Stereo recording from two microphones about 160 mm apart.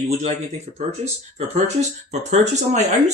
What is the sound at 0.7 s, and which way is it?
Speech, 40° right (ahead or behind).